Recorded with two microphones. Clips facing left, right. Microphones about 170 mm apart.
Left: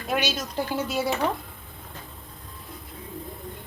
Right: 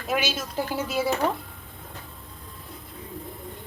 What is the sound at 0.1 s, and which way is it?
A woman's voice, 5° right (ahead or behind).